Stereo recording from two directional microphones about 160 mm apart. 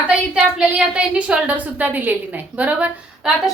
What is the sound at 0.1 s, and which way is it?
A woman's voice, 5° right (ahead or behind).